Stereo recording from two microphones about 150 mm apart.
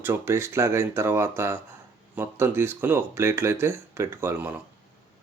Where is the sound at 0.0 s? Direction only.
15° right (ahead or behind).